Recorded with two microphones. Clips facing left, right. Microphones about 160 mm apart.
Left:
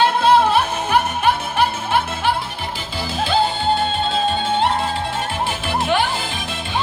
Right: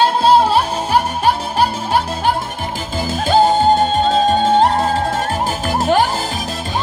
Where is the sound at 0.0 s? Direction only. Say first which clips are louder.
Right 2 dB; 35° right (ahead or behind).